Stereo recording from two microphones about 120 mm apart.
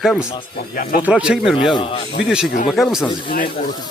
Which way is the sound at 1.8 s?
50° left (ahead or behind).